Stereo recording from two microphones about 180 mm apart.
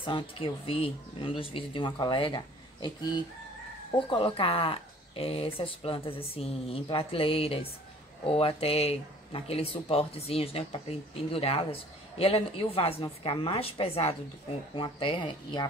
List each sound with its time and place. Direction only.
0.0 s speech: 30° left (ahead or behind)
4.1 s speech: 30° left (ahead or behind)